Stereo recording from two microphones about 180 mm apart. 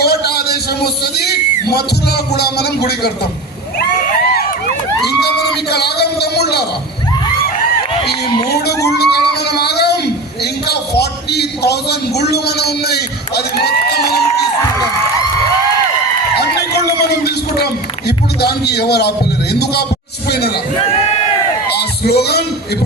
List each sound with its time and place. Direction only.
0.0 s a man's voice: 60° left (ahead or behind)
3.8 s a sound: 55° left (ahead or behind)
5.7 s a man's voice: 65° left (ahead or behind)
8.4 s a man's voice: 65° left (ahead or behind)
17.1 s speech: 65° left (ahead or behind)
20.2 s chatter: 65° left (ahead or behind)
21.7 s music: 65° left (ahead or behind)